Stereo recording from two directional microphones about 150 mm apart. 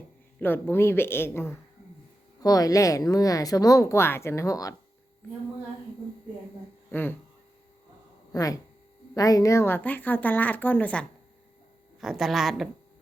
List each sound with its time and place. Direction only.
0.3 s speech: 15° left (ahead or behind)
6.9 s speech: 15° left (ahead or behind)
8.3 s speech: 20° left (ahead or behind)
11.9 s speech: centre (ahead or behind)